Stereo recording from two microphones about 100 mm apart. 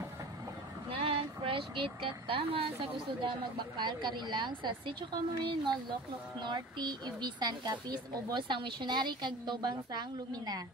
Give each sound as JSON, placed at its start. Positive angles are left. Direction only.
{"t": 0.9, "sound": "speech", "side_deg": -70}